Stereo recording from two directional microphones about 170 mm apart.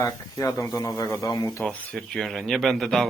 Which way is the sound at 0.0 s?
20° left (ahead or behind).